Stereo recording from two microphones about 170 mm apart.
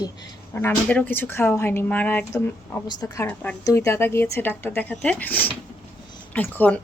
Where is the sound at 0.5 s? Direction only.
10° left (ahead or behind).